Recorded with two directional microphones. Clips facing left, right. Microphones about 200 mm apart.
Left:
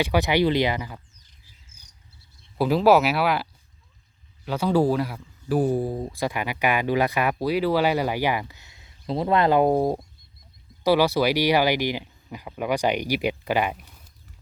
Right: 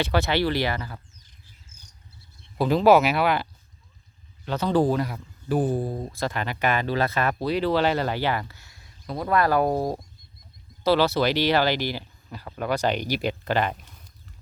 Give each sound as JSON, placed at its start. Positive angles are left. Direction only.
{"t": 0.0, "sound": "speech", "side_deg": 15}
{"t": 2.6, "sound": "speech", "side_deg": 5}
{"t": 4.4, "sound": "speech", "side_deg": 10}